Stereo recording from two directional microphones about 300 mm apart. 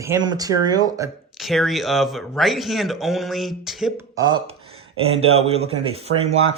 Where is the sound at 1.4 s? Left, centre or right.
Centre.